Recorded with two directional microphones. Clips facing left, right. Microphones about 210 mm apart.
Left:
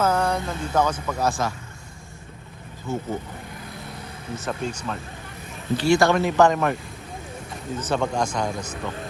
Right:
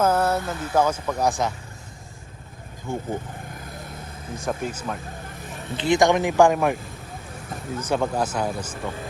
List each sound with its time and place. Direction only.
0.0 s speech: 5° right (ahead or behind)
2.8 s speech: 15° right (ahead or behind)
3.6 s vehicle: 50° right (ahead or behind)
4.4 s speech: 10° right (ahead or behind)
5.7 s speech: 20° right (ahead or behind)
7.8 s speech: 10° right (ahead or behind)